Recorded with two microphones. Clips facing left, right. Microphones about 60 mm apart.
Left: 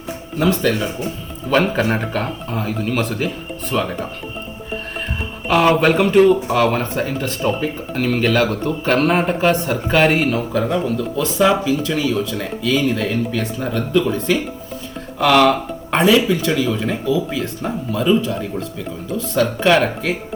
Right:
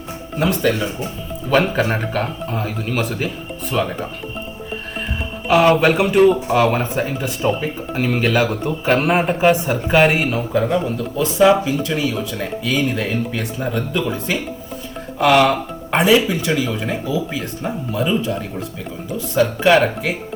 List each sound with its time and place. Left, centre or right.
0.3 s speech: centre
5.5 s speech: centre